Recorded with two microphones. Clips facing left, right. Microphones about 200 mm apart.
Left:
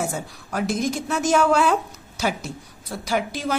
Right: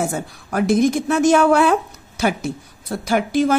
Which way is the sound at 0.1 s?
55° right (ahead or behind).